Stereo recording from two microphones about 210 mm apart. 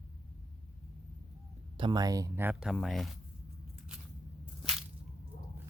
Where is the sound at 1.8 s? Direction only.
20° right (ahead or behind); by 3.1 s centre (ahead or behind).